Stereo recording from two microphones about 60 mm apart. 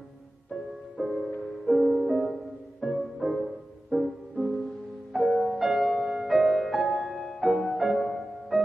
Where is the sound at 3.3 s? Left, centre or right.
Right.